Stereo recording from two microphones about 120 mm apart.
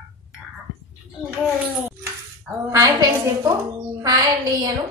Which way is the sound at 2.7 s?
30° right (ahead or behind).